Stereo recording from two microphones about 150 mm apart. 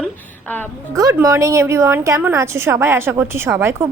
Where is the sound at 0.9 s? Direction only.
20° right (ahead or behind).